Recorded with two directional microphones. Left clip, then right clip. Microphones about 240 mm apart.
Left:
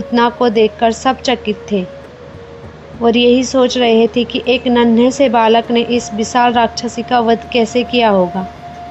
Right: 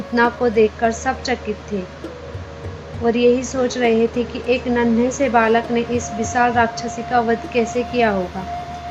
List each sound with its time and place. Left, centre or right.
0.1 s a woman's voice: left
3.0 s a woman's voice: left